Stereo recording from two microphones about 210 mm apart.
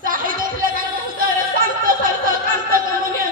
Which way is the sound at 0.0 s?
40° right (ahead or behind).